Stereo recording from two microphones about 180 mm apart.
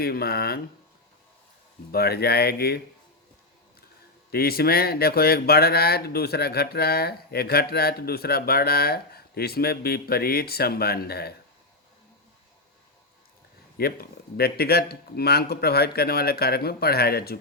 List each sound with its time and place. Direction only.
0.0 s speech: 60° left (ahead or behind)
1.9 s speech: 60° left (ahead or behind)
4.3 s speech: 60° left (ahead or behind)
13.7 s speech: 60° left (ahead or behind)